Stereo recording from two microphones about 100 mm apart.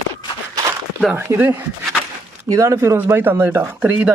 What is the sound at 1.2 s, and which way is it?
Speech, 20° right (ahead or behind).